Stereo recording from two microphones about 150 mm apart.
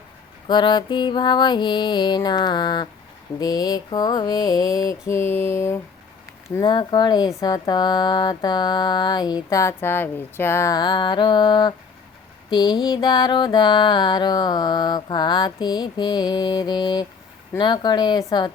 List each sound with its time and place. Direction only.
0.4 s mantra: 30° left (ahead or behind)
6.6 s mantra: 30° left (ahead or behind)